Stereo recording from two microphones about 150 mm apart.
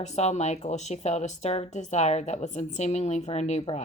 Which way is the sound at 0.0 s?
50° left (ahead or behind).